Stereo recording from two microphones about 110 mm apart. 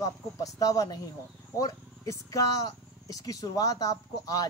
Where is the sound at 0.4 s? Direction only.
30° left (ahead or behind).